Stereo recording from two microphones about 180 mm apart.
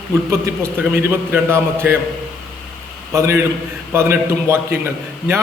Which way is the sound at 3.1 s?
15° right (ahead or behind).